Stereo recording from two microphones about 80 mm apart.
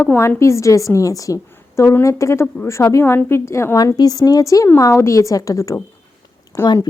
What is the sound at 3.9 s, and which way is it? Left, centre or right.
A woman's voice, left.